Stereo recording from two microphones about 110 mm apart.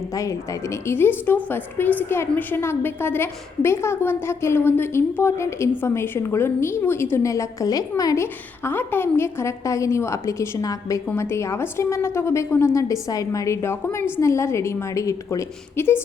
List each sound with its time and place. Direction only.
0.1 s a woman's voice: 30° left (ahead or behind)